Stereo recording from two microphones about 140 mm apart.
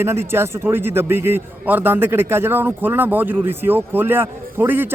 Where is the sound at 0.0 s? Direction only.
20° right (ahead or behind).